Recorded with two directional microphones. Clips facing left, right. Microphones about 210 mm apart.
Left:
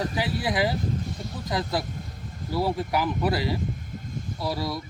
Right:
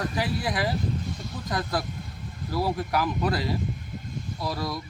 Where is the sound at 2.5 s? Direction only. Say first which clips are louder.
Left 1 dB; 25° left (ahead or behind).